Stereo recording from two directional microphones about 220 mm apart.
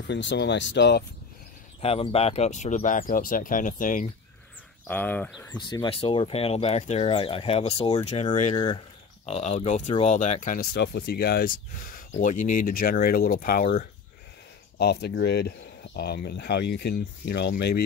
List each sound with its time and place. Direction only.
0.1 s speech: 55° left (ahead or behind)
1.8 s speech: 25° left (ahead or behind)
4.8 s speech: 5° left (ahead or behind)
5.6 s speech: 20° left (ahead or behind); by 17.8 s 45° left (ahead or behind)